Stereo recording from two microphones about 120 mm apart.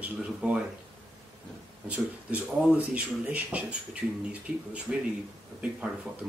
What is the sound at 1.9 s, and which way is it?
Speech, 10° right (ahead or behind).